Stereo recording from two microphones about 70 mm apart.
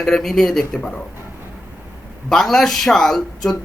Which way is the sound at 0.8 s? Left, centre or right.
Centre.